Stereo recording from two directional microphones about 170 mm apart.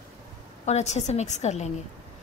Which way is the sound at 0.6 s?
40° left (ahead or behind).